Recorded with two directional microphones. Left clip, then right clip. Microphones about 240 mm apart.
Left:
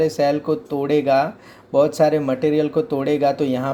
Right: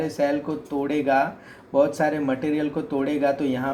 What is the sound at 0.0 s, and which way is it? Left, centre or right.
Speech, left.